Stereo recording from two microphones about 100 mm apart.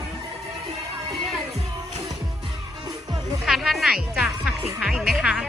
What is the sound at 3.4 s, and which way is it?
Speech, centre (ahead or behind).